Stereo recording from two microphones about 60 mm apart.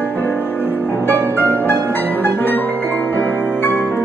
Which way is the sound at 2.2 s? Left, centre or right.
Left.